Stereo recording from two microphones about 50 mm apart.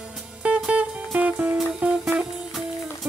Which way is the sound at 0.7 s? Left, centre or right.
Right.